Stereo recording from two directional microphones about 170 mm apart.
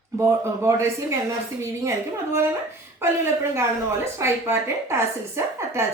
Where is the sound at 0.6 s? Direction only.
15° right (ahead or behind).